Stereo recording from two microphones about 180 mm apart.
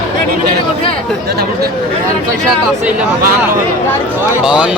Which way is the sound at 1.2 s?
60° right (ahead or behind).